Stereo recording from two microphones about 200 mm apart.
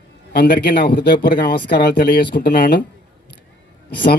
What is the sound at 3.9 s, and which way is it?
Speech, 45° left (ahead or behind).